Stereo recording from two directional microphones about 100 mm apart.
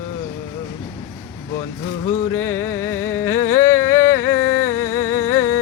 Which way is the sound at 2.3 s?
25° left (ahead or behind).